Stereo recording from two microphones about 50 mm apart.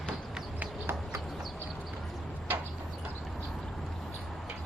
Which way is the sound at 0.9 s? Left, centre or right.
Right.